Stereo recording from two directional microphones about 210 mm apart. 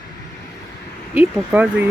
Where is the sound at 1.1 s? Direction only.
5° right (ahead or behind).